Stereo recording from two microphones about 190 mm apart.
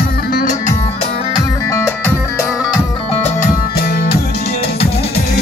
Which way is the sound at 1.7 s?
15° left (ahead or behind).